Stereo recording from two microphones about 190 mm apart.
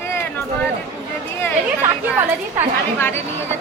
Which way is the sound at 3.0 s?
10° left (ahead or behind).